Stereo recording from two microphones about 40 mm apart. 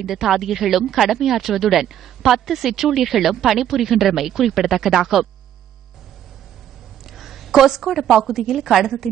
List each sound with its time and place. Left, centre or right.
0.0 s speech: centre
7.2 s a woman's voice: centre